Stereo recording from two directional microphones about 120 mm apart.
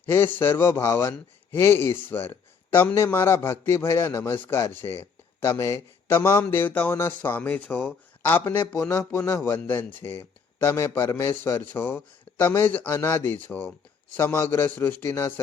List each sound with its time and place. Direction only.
0.0 s a man's voice: 20° left (ahead or behind)